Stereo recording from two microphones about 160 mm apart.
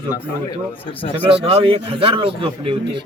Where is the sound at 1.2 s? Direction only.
35° right (ahead or behind).